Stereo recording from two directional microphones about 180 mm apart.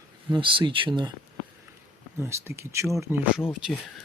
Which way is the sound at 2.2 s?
15° right (ahead or behind).